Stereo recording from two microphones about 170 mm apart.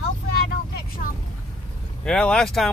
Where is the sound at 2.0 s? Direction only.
5° left (ahead or behind).